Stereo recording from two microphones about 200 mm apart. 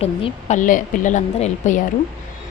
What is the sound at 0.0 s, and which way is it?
Speech, 30° left (ahead or behind).